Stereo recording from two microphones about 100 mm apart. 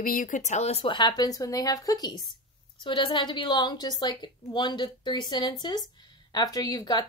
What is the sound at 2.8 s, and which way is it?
A woman's voice, 50° left (ahead or behind).